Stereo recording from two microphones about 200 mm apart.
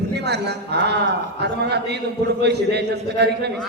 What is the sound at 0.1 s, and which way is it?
Speech, 55° right (ahead or behind).